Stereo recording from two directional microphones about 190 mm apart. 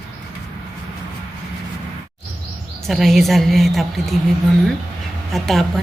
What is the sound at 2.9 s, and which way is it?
A woman's voice, centre (ahead or behind).